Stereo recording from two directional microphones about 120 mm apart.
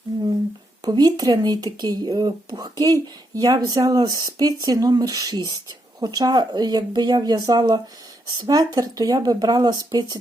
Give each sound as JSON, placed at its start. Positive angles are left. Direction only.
{"t": 0.8, "sound": "speech", "side_deg": -35}